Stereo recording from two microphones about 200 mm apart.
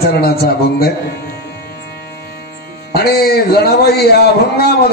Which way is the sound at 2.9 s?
50° left (ahead or behind).